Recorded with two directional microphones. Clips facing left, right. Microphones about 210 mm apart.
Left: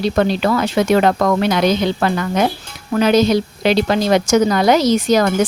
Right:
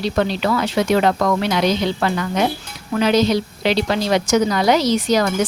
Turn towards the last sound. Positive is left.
turn(degrees=50)  # may be behind; listen again after turning